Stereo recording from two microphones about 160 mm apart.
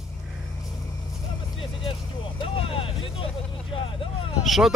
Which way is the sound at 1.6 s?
35° left (ahead or behind).